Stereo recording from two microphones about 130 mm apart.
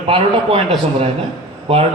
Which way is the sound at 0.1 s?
50° right (ahead or behind).